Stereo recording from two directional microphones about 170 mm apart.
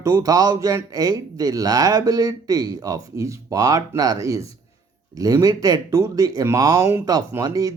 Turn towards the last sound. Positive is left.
turn(degrees=-20)  # may be behind; listen again after turning